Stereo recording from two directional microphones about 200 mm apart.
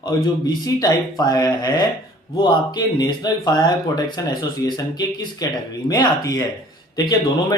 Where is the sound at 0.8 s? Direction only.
20° left (ahead or behind).